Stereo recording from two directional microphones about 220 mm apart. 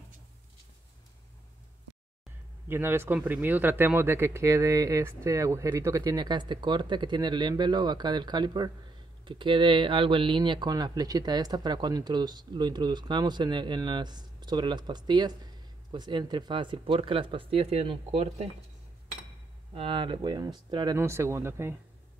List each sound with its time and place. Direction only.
2.7 s speech: 10° right (ahead or behind); by 18.5 s 30° right (ahead or behind)
19.7 s speech: 25° right (ahead or behind)